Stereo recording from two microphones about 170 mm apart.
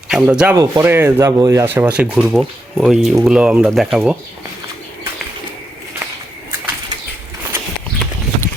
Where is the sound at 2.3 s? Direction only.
Centre (ahead or behind).